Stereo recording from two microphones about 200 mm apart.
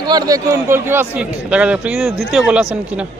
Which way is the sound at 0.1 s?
20° right (ahead or behind).